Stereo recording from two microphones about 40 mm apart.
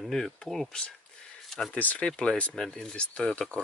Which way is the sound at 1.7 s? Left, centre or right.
Left.